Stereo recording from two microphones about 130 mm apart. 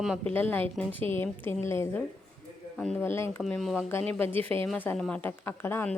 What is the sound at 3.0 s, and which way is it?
Speech, 20° left (ahead or behind).